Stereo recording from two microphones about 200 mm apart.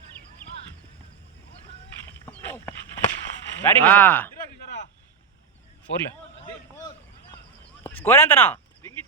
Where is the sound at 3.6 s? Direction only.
10° left (ahead or behind).